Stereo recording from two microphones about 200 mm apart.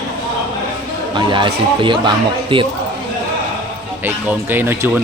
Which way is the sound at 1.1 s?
25° right (ahead or behind).